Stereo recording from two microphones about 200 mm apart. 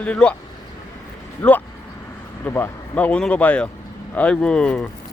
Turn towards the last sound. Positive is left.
turn(degrees=5)  # may be behind; listen again after turning